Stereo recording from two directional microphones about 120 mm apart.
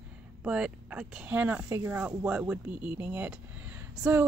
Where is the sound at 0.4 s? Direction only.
10° right (ahead or behind).